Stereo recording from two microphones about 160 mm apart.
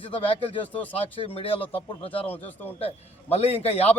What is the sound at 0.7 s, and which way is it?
Speech, 10° left (ahead or behind).